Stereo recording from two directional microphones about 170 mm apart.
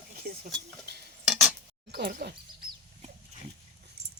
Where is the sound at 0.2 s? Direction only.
60° right (ahead or behind).